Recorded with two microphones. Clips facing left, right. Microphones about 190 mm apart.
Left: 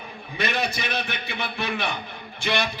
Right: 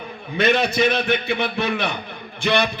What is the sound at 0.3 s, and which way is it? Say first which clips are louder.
A man's voice: right 9 dB; 60° right (ahead or behind).